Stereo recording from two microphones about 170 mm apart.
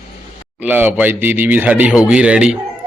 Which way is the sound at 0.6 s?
10° right (ahead or behind).